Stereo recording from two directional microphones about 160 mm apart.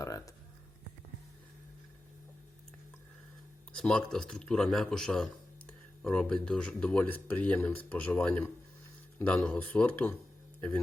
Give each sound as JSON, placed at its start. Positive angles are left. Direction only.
{"t": 0.0, "sound": "music", "side_deg": 20}
{"t": 3.7, "sound": "speech", "side_deg": 5}